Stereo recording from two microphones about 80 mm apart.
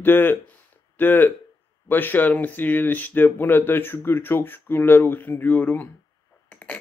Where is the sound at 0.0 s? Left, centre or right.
Left.